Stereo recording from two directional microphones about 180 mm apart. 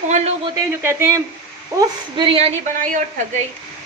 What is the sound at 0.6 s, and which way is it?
Speech, 15° right (ahead or behind).